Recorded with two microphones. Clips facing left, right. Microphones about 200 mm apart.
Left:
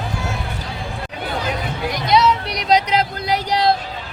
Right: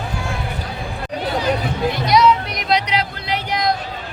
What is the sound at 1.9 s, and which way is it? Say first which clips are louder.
Music: right 2 dB; 15° left (ahead or behind).